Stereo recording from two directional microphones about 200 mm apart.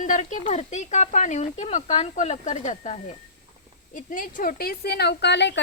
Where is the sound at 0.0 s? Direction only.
40° left (ahead or behind).